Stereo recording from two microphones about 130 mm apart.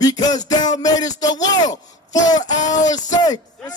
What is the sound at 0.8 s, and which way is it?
Speech, 30° left (ahead or behind).